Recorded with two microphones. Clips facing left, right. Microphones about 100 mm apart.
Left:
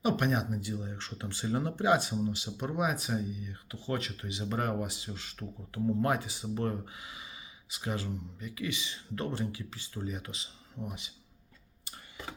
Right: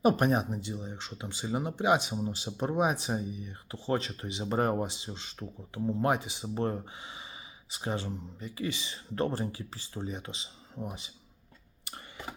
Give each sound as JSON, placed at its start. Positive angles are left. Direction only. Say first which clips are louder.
{"t": 0.0, "sound": "speech", "louder": "right 4 dB", "side_deg": -40}
{"t": 2.6, "sound": "speech", "louder": "right 5 dB", "side_deg": -30}
{"t": 11.9, "sound": "a sound", "louder": "right 3 dB", "side_deg": -65}